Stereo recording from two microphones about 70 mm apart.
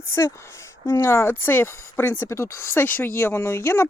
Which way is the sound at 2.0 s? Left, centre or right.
Left.